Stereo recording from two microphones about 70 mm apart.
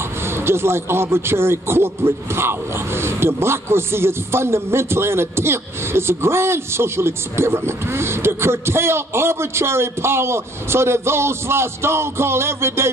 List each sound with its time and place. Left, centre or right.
0.2 s speech: right